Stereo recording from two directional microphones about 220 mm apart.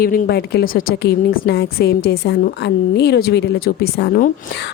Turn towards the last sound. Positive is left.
turn(degrees=45)  # may be behind; listen again after turning